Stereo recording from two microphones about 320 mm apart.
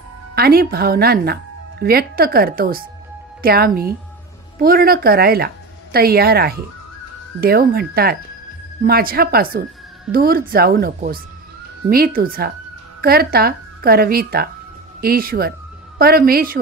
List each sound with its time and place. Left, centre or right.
0.3 s speech: right